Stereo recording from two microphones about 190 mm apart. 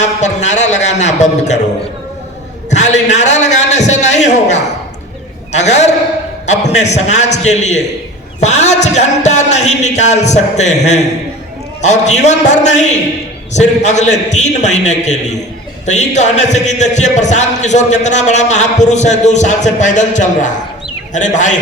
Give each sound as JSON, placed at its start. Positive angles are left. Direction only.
{"t": 0.0, "sound": "a man's voice", "side_deg": 40}
{"t": 2.6, "sound": "a man's voice", "side_deg": 35}
{"t": 5.5, "sound": "a man's voice", "side_deg": 35}
{"t": 6.4, "sound": "a sound", "side_deg": 35}
{"t": 6.8, "sound": "speech", "side_deg": 35}